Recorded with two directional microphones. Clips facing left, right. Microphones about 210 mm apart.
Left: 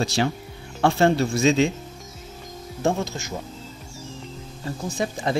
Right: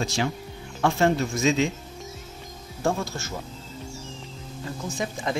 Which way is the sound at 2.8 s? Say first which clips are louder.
Left 2 dB; 20° left (ahead or behind).